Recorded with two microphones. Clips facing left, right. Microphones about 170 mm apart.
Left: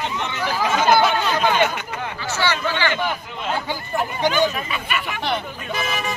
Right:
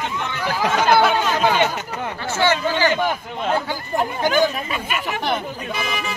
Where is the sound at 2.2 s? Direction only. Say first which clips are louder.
Right 4 dB; 50° right (ahead or behind).